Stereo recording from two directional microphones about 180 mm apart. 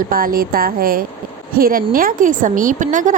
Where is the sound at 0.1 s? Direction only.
50° right (ahead or behind).